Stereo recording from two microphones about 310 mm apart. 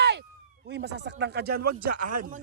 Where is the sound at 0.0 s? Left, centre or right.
Right.